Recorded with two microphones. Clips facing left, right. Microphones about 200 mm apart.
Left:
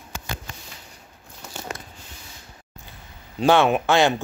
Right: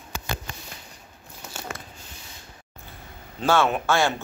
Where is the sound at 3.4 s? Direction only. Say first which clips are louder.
Left 4 dB; 20° left (ahead or behind).